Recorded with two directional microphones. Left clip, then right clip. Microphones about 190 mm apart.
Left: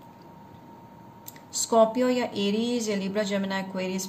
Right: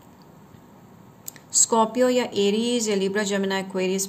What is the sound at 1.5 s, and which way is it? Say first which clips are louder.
A woman's voice: even; 40° right (ahead or behind).